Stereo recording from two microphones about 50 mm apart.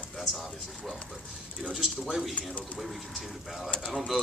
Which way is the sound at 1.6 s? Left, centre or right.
Centre.